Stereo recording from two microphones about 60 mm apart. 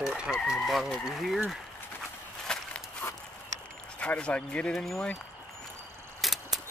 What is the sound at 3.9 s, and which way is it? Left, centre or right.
Speech, centre.